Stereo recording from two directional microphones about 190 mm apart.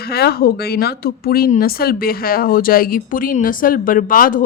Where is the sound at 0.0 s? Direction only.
55° left (ahead or behind).